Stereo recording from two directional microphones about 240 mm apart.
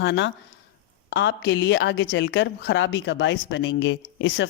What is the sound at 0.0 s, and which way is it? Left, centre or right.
A woman's voice, left.